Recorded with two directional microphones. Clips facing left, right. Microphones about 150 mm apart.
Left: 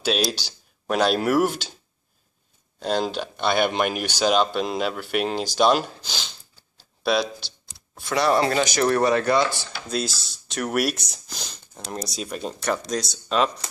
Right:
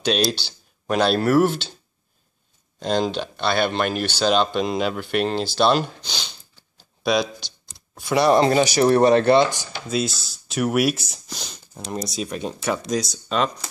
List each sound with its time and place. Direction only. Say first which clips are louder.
0.0 s speech: right 2 dB; 5° left (ahead or behind)
2.8 s speech: right 2 dB; 5° left (ahead or behind)
7.0 s a sound: right 1 dB; 5° left (ahead or behind)
8.1 s speech: right 4 dB; 15° right (ahead or behind)
8.6 s speech: right 4 dB; 10° right (ahead or behind)
8.9 s speech: right 6 dB; 25° right (ahead or behind)
9.8 s speech: right 3 dB; centre (ahead or behind)